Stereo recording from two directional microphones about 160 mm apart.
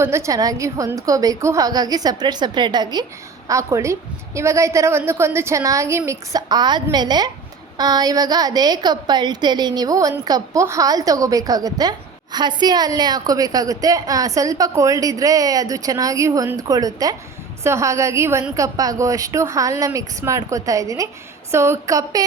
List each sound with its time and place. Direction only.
0.0 s a woman's voice: 15° right (ahead or behind)